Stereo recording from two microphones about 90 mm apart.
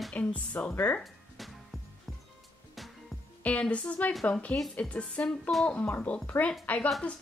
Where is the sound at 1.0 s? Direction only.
Centre (ahead or behind).